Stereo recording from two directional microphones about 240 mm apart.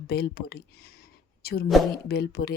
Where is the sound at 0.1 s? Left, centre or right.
Left.